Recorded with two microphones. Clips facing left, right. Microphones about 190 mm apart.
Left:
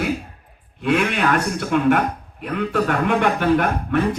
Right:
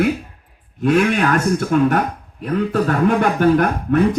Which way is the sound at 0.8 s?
40° right (ahead or behind).